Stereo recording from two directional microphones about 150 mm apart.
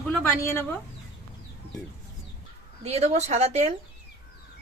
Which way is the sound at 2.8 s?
45° right (ahead or behind).